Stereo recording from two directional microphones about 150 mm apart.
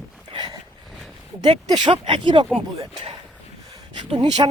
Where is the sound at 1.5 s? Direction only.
30° right (ahead or behind).